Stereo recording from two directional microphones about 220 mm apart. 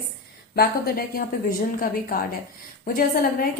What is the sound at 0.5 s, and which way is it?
A woman's voice, 40° left (ahead or behind).